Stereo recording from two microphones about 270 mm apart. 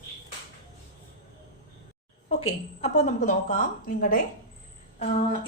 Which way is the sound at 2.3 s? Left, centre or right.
Left.